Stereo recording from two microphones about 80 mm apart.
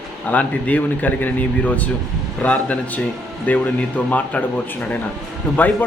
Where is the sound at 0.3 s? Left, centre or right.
Centre.